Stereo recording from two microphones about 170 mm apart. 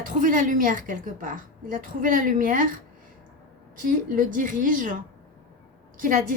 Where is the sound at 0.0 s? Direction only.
55° right (ahead or behind).